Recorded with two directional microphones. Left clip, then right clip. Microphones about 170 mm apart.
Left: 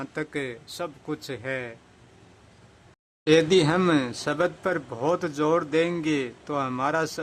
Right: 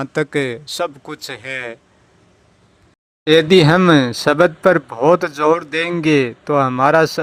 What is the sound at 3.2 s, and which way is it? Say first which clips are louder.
A man's voice: right 8 dB; 25° right (ahead or behind).